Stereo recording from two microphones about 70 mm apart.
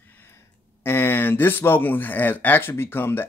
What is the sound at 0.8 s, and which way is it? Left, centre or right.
Speech, left.